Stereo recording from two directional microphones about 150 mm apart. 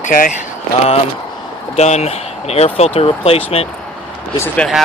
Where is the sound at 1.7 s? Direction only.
45° left (ahead or behind).